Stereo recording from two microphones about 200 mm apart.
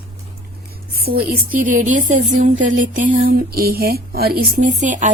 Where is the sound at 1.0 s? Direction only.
50° right (ahead or behind).